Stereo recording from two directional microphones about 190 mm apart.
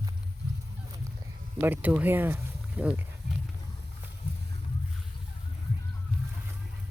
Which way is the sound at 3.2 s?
60° right (ahead or behind).